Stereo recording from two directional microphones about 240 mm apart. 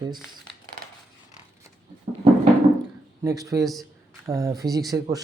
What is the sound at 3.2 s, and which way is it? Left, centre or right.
Speech, centre.